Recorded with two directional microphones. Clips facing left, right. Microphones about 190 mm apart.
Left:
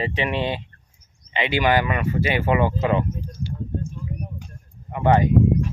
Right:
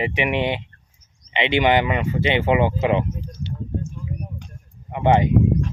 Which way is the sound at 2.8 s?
20° right (ahead or behind).